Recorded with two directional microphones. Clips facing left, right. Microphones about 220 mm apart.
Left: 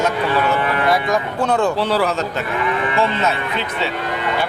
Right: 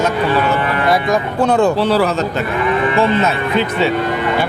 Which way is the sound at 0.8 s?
35° right (ahead or behind).